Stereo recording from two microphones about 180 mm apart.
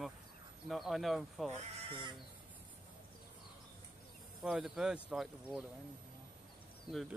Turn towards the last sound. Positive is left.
turn(degrees=-30)  # may be behind; listen again after turning